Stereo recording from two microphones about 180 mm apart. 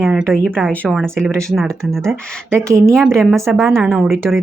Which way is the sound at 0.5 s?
10° right (ahead or behind).